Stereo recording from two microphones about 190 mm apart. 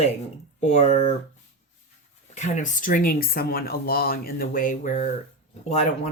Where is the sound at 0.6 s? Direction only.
35° left (ahead or behind).